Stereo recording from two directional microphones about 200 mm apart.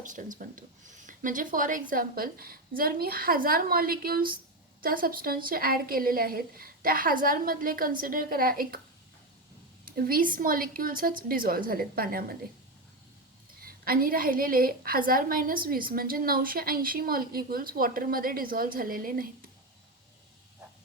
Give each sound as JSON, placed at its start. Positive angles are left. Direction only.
{"t": 0.0, "sound": "a woman's voice", "side_deg": -40}
{"t": 9.8, "sound": "a woman's voice", "side_deg": -45}
{"t": 13.6, "sound": "a woman's voice", "side_deg": -45}